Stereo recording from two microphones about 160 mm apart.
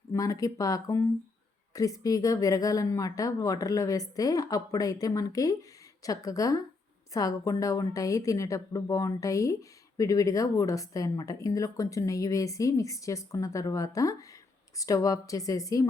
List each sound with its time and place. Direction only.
0.1 s a woman's voice: 20° left (ahead or behind)